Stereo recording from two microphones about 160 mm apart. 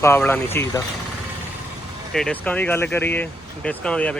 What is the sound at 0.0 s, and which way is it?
Speech, 15° left (ahead or behind).